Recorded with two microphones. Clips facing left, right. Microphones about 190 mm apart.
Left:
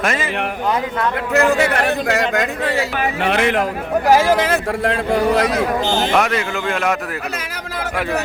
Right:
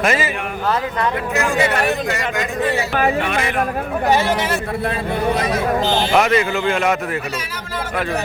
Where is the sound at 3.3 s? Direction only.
70° left (ahead or behind); by 5.5 s 90° left.